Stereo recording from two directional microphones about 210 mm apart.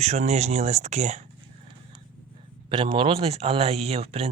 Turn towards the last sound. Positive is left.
turn(degrees=-30)  # may be behind; listen again after turning